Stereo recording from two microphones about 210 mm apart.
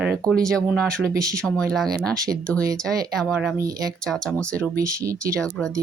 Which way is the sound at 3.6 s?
15° right (ahead or behind).